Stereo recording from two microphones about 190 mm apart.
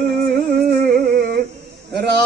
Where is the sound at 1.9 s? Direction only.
60° right (ahead or behind).